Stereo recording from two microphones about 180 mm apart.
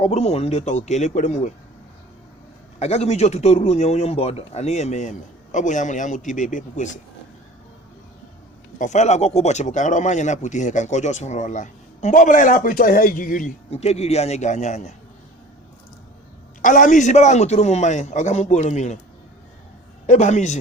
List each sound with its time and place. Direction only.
0.0 s speech: 35° left (ahead or behind)
2.7 s speech: 35° left (ahead or behind)
8.8 s speech: 40° left (ahead or behind)
13.7 s speech: 35° left (ahead or behind)
16.6 s speech: 45° left (ahead or behind)
20.1 s speech: 40° left (ahead or behind)